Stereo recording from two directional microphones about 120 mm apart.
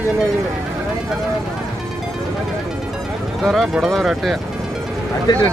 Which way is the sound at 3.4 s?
Centre (ahead or behind).